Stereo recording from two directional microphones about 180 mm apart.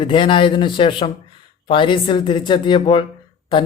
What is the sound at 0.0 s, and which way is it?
A man's voice, 25° left (ahead or behind).